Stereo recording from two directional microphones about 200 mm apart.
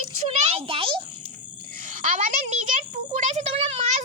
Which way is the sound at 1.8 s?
40° right (ahead or behind).